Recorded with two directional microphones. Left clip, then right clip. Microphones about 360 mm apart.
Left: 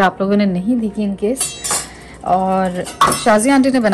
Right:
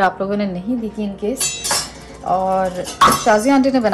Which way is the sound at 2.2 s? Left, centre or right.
Left.